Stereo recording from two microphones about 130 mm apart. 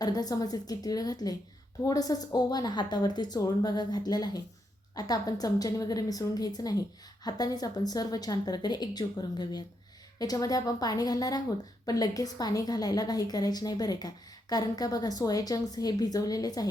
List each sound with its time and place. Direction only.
0.0 s a woman's voice: 30° left (ahead or behind)